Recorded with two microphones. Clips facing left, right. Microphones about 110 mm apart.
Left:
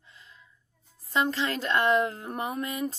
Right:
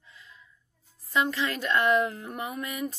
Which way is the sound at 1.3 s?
30° left (ahead or behind).